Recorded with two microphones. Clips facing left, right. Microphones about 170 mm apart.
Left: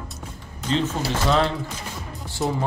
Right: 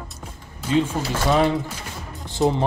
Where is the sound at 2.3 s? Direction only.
20° right (ahead or behind).